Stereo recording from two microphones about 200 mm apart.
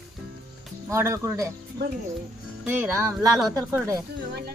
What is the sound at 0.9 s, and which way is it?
Speech, 15° right (ahead or behind).